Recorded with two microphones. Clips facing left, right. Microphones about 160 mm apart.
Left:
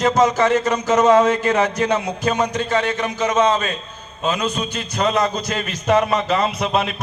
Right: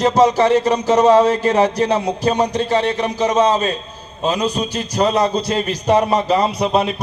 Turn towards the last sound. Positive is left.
turn(degrees=-35)  # may be behind; listen again after turning